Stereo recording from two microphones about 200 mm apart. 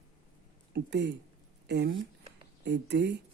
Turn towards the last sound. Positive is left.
turn(degrees=-55)  # may be behind; listen again after turning